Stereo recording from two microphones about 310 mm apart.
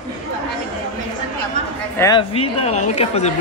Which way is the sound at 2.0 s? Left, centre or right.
Centre.